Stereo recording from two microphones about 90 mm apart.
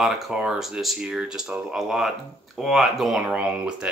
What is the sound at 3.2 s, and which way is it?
Speech, 15° right (ahead or behind).